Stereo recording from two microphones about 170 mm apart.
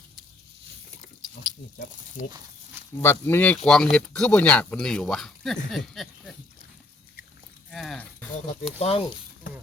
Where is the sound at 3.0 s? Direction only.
15° left (ahead or behind).